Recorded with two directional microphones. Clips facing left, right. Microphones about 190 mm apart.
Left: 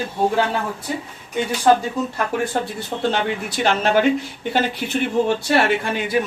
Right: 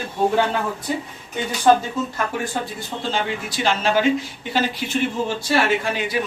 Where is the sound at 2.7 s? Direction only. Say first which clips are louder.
Left 3 dB; 60° left (ahead or behind).